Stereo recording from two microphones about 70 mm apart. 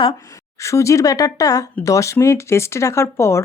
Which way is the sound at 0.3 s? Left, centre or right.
Left.